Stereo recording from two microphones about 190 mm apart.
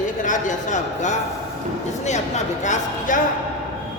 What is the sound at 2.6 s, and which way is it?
Speech, 40° left (ahead or behind).